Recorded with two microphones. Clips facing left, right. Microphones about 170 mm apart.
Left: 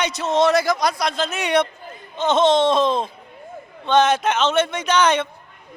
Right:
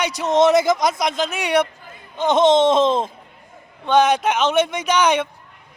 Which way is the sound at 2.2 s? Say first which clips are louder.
Right 2 dB; 15° right (ahead or behind).